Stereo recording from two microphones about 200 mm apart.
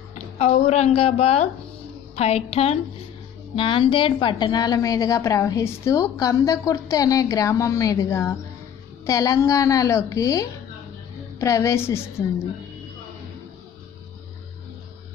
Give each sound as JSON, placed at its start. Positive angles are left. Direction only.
{"t": 0.1, "sound": "a woman's voice", "side_deg": 30}